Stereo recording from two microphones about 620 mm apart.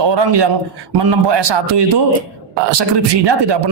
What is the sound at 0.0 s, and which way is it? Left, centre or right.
Speech, right.